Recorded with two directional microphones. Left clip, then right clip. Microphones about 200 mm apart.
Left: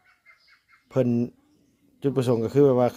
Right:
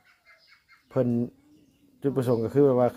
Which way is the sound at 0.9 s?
10° left (ahead or behind).